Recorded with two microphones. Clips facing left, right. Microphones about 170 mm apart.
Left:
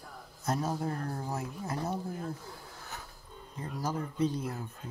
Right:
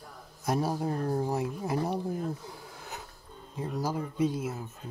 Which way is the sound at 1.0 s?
25° right (ahead or behind).